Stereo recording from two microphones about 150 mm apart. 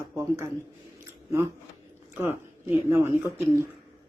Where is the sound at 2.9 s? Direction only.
15° right (ahead or behind).